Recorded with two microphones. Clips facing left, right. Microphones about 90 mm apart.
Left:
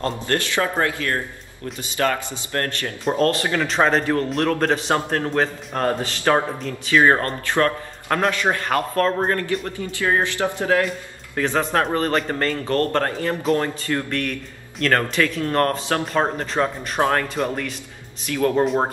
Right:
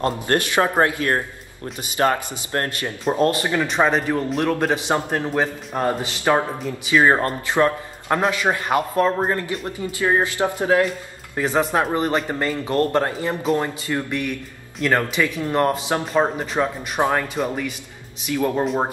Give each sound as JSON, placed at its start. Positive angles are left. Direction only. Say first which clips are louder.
{"t": 0.0, "sound": "a man's voice", "louder": "right 3 dB", "side_deg": -20}
{"t": 18.6, "sound": "speech", "louder": "left 4 dB", "side_deg": 0}